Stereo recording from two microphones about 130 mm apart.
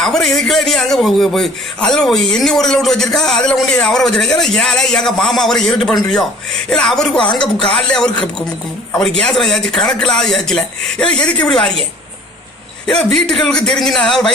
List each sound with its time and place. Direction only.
0.0 s a man's voice: 5° left (ahead or behind)
7.2 s speech: 35° left (ahead or behind)
7.7 s a man's voice: 5° left (ahead or behind)